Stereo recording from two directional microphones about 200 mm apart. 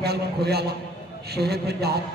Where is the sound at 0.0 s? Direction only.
55° right (ahead or behind).